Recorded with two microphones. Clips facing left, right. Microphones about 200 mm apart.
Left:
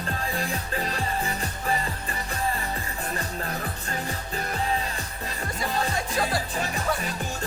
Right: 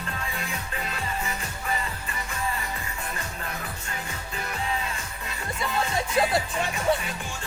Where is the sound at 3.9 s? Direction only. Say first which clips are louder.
Left 5 dB; 35° left (ahead or behind).